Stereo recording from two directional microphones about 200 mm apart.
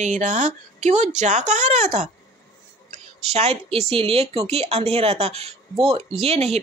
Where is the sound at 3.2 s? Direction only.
30° right (ahead or behind).